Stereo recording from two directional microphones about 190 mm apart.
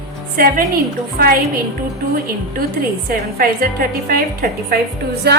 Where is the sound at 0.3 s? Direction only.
50° right (ahead or behind).